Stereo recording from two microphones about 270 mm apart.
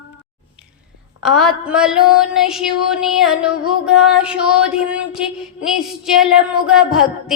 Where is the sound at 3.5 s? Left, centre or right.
Left.